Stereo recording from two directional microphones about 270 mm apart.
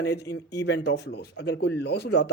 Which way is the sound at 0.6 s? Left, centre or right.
Left.